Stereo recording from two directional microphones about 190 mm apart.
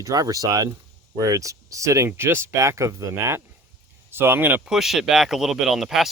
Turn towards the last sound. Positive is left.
turn(degrees=0)  # may be behind; listen again after turning